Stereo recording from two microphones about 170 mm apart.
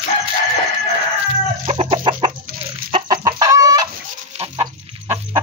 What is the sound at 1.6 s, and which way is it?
Chicken, 40° right (ahead or behind).